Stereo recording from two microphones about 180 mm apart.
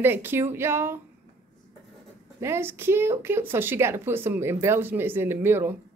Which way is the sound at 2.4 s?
15° right (ahead or behind).